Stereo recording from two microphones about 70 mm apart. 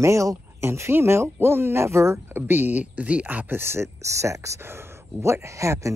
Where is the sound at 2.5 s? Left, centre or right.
Right.